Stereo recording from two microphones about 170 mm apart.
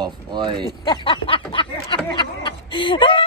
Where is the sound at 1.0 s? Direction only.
30° left (ahead or behind).